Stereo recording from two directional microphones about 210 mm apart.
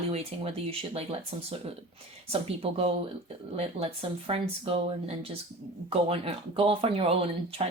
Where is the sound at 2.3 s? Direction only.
25° right (ahead or behind).